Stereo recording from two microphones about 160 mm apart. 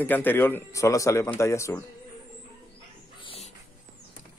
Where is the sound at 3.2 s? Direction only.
35° left (ahead or behind).